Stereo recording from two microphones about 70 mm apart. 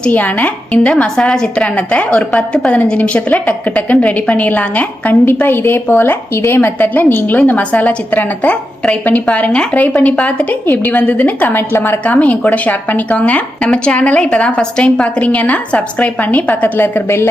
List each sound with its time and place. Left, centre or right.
0.1 s a woman's voice: left